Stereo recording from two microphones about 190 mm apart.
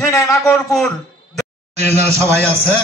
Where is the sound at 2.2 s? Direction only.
15° right (ahead or behind).